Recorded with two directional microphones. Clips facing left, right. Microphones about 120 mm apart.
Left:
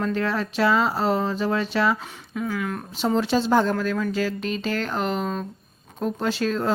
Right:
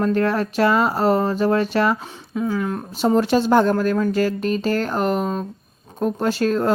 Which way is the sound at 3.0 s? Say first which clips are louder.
Right 5 dB; 45° right (ahead or behind).